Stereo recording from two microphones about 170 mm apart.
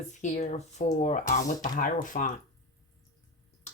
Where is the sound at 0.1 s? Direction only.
45° left (ahead or behind).